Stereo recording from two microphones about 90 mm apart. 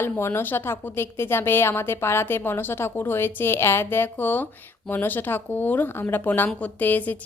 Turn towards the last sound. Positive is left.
turn(degrees=20)  # may be behind; listen again after turning